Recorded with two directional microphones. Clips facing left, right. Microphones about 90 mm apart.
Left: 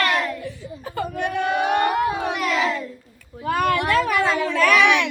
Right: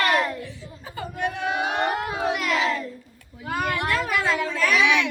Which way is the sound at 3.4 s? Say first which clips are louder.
Left 6 dB; 65° left (ahead or behind).